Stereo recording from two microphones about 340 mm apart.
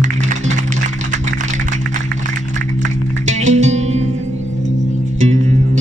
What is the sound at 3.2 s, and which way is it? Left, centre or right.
Music, centre.